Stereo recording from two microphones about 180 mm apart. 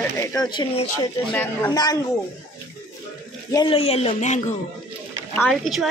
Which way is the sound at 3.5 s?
30° left (ahead or behind).